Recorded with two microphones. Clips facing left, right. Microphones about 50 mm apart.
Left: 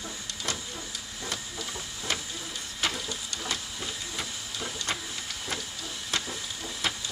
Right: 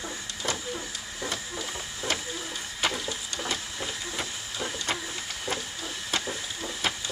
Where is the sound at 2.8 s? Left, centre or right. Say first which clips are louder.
Right 2 dB; centre.